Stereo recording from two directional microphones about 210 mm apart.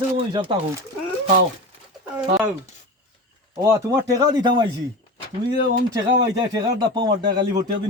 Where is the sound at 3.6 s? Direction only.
15° right (ahead or behind).